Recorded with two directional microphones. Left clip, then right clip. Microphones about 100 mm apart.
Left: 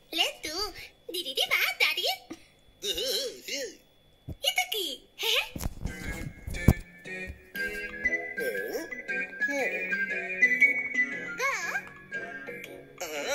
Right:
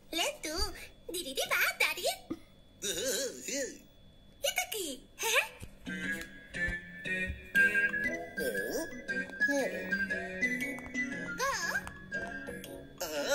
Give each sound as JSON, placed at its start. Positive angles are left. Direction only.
{"t": 0.1, "sound": "a sound", "side_deg": 20}
{"t": 2.8, "sound": "hiccup", "side_deg": 20}
{"t": 3.4, "sound": "throat clearing", "side_deg": 15}
{"t": 4.5, "sound": "giggle", "side_deg": 20}
{"t": 5.9, "sound": "music", "side_deg": 40}
{"t": 7.5, "sound": "music", "side_deg": 20}